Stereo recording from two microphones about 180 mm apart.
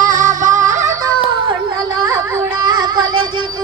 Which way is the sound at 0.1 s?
45° right (ahead or behind).